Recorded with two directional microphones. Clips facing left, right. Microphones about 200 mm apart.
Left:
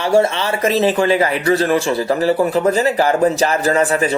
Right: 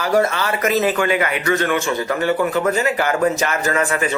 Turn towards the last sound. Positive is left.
turn(degrees=35)  # may be behind; listen again after turning